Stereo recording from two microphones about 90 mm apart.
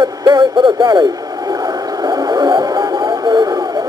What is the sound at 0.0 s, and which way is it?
Speech, 55° right (ahead or behind).